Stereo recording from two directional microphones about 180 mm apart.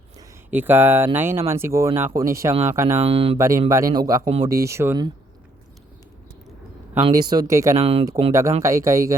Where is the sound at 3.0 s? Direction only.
30° right (ahead or behind).